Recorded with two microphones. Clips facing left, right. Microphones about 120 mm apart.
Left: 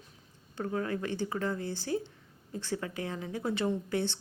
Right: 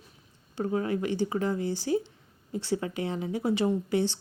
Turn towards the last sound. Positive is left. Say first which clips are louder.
# right 5 dB
turn(degrees=-15)  # may be behind; listen again after turning